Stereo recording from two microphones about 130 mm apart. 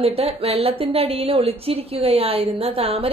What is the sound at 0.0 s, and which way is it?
A woman's voice, 50° right (ahead or behind).